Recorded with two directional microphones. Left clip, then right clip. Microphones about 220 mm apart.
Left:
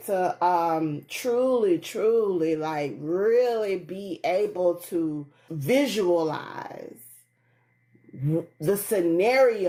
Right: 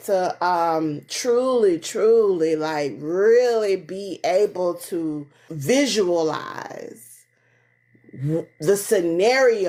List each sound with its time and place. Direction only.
0.0 s speech: 35° right (ahead or behind)
8.3 s speech: 35° right (ahead or behind)